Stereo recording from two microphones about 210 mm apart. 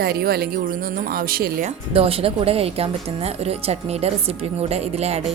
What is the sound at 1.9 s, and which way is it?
Speech, 25° right (ahead or behind).